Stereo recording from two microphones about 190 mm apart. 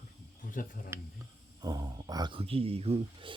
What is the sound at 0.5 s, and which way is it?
Speech, 45° left (ahead or behind).